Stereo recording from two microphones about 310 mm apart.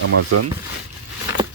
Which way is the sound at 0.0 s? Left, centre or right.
Right.